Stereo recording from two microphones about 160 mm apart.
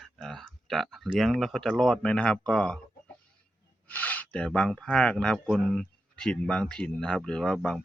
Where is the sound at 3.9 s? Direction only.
10° left (ahead or behind).